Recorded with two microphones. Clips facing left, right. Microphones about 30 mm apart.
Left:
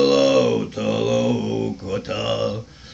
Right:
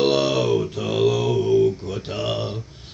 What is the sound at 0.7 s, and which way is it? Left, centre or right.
Mantra, left.